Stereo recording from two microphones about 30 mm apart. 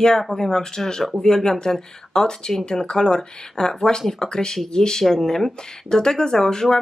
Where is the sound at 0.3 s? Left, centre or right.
Centre.